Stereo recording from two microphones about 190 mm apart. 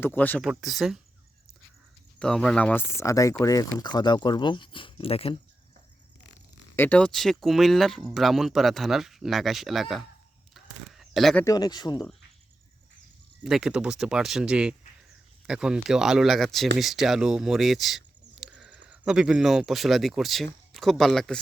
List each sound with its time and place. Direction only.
0.0 s speech: 10° left (ahead or behind)
2.1 s speech: 5° left (ahead or behind); by 5.4 s 30° left (ahead or behind)
6.7 s speech: 10° left (ahead or behind)
10.5 s a sound: centre (ahead or behind)
11.4 s speech: 20° left (ahead or behind)
13.4 s speech: 5° right (ahead or behind)